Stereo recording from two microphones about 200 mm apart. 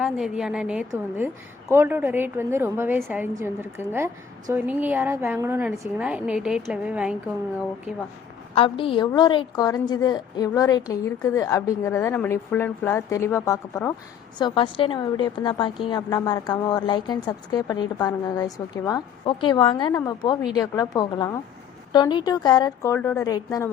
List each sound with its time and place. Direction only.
0.0 s a woman's voice: 5° right (ahead or behind)
8.5 s a woman's voice: 25° left (ahead or behind)